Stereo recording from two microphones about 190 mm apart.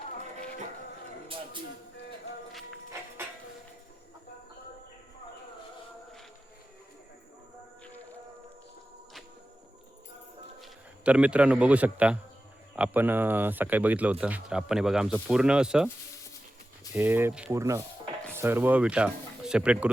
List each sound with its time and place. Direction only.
10.6 s speech: 5° right (ahead or behind)
16.9 s speech: 10° right (ahead or behind)